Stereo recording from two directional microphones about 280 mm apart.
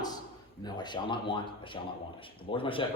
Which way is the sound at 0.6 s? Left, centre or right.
Centre.